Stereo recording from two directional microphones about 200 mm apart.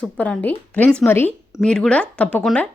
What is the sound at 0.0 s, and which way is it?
Speech, 5° left (ahead or behind).